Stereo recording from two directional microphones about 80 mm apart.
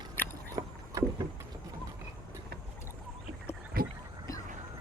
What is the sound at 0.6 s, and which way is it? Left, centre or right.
Rowboat, right.